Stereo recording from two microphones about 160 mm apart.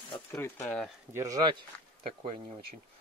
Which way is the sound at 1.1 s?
20° right (ahead or behind).